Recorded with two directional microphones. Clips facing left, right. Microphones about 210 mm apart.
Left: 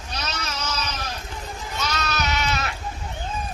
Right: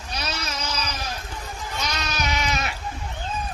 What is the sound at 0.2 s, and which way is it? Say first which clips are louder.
Goat: even; 10° right (ahead or behind).